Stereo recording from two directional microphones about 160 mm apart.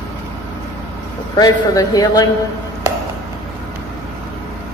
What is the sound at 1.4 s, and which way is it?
Speech, 25° left (ahead or behind).